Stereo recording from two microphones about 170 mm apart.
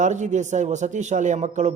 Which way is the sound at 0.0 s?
45° right (ahead or behind).